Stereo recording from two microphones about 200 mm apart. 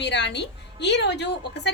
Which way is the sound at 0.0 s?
60° left (ahead or behind).